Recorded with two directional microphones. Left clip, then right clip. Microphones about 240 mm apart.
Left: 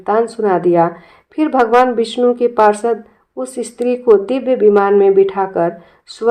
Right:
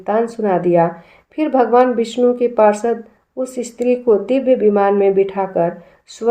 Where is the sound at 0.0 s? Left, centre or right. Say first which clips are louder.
Left 3 dB; left.